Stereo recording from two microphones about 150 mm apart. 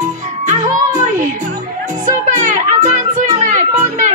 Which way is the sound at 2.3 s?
55° right (ahead or behind).